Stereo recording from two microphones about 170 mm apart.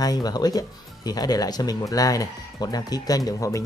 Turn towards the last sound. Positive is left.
turn(degrees=20)  # may be behind; listen again after turning